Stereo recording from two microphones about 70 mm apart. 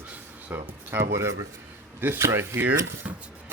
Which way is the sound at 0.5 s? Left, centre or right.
Right.